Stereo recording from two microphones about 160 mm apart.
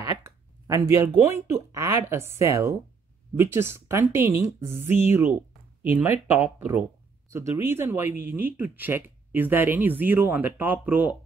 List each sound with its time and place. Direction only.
0.2 s speech: 20° right (ahead or behind)